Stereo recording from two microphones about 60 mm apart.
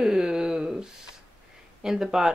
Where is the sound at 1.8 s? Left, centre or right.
Centre.